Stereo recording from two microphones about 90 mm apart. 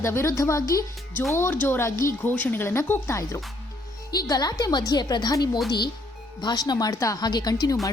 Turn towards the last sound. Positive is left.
turn(degrees=45)  # may be behind; listen again after turning